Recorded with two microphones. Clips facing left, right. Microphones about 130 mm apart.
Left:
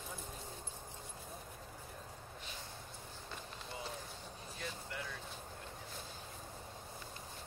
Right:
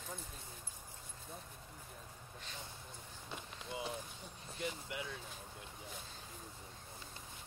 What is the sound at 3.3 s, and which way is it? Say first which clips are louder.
Run: right 2 dB; 20° right (ahead or behind).